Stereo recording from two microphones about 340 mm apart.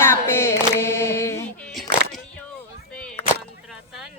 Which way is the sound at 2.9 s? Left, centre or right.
Centre.